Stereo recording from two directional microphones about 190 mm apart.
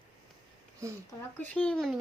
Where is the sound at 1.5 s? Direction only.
5° left (ahead or behind).